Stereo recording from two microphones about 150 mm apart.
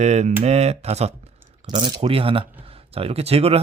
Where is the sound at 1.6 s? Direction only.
30° right (ahead or behind).